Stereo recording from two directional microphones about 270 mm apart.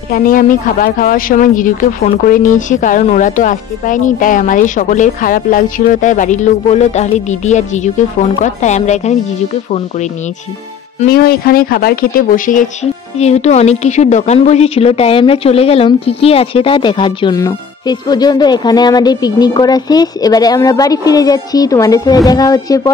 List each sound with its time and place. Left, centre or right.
0.1 s a woman's voice: left; by 22.9 s centre